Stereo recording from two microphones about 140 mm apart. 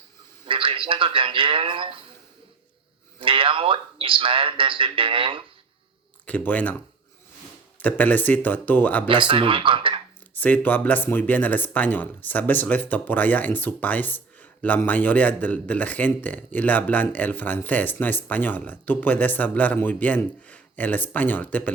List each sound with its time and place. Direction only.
0.4 s a man's voice: 40° right (ahead or behind)
3.2 s speech: 40° right (ahead or behind)
6.2 s speech: 10° left (ahead or behind)
7.8 s speech: 10° left (ahead or behind)
9.0 s speech: 35° right (ahead or behind)
10.3 s speech: 10° left (ahead or behind)